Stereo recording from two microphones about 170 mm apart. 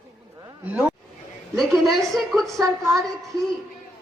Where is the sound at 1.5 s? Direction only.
Centre (ahead or behind).